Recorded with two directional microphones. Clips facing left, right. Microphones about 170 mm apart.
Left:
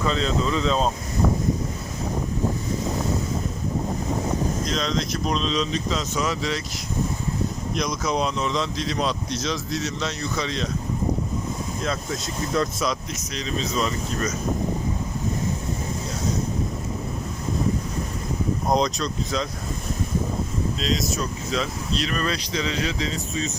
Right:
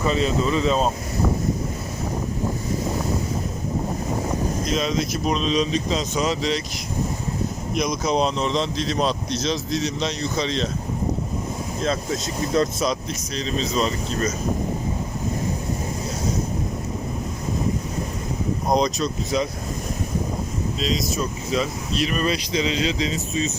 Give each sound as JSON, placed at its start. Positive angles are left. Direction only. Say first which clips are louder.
{"t": 0.0, "sound": "speech", "louder": "right 2 dB", "side_deg": -10}
{"t": 4.7, "sound": "speech", "louder": "right 2 dB", "side_deg": -10}
{"t": 8.0, "sound": "speech", "louder": "right 3 dB", "side_deg": -25}
{"t": 12.5, "sound": "speech", "louder": "right 3 dB", "side_deg": -30}
{"t": 18.7, "sound": "speech", "louder": "right 2 dB", "side_deg": 0}
{"t": 20.7, "sound": "speech", "louder": "right 2 dB", "side_deg": 0}